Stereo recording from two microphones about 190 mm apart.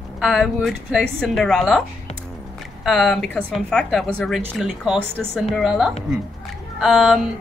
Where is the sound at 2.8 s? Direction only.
Centre (ahead or behind).